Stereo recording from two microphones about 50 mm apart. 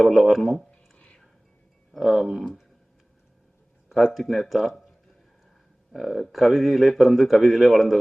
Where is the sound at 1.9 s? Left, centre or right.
Centre.